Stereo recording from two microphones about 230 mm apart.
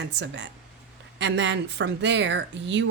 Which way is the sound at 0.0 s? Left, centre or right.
Right.